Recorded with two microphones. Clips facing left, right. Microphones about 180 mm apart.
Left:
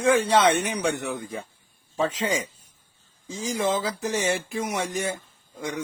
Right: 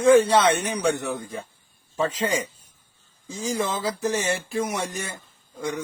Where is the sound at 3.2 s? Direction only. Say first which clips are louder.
Left 1 dB; 15° left (ahead or behind).